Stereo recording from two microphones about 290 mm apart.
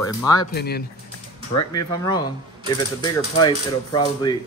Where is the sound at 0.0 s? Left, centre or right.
Centre.